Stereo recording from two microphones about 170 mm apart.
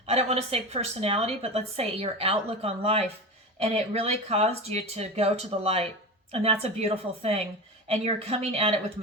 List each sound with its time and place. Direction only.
0.0 s a woman's voice: 40° right (ahead or behind)